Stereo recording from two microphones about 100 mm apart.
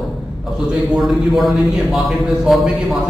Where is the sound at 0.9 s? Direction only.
Centre (ahead or behind).